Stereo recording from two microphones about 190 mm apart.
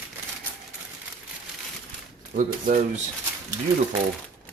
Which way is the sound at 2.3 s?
45° right (ahead or behind).